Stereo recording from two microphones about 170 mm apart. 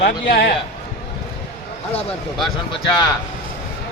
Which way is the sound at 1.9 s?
35° left (ahead or behind).